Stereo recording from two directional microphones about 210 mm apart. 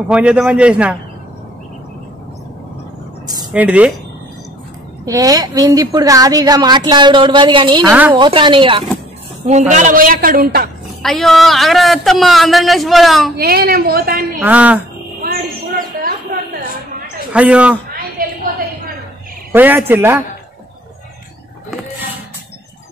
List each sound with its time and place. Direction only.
0.1 s a man's voice: 5° right (ahead or behind)
3.5 s speech: 5° right (ahead or behind)
5.0 s a woman's voice: 15° right (ahead or behind)
9.5 s a woman's voice: 35° right (ahead or behind)
11.0 s a man's voice: centre (ahead or behind)
13.4 s a woman's voice: 45° right (ahead or behind)
14.4 s speech: 5° right (ahead or behind)
17.3 s a man's voice: 5° right (ahead or behind)
18.2 s a sound: 45° right (ahead or behind)
19.5 s speech: 10° right (ahead or behind)